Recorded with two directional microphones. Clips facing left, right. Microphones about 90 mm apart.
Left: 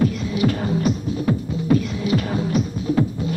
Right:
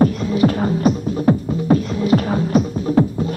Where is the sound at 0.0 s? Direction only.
40° right (ahead or behind).